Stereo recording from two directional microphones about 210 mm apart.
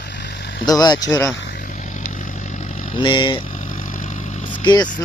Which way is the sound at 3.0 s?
20° left (ahead or behind).